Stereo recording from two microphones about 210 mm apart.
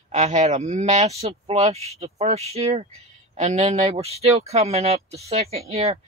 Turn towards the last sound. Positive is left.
turn(degrees=-30)  # may be behind; listen again after turning